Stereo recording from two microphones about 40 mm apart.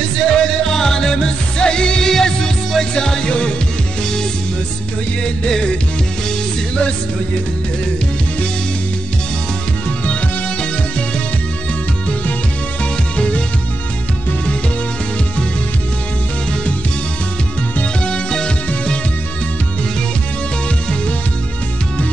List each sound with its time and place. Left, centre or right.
0.0 s music: centre
5.2 s music: centre
18.0 s music: left